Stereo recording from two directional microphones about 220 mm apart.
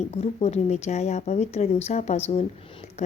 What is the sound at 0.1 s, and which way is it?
A woman's voice, 30° left (ahead or behind).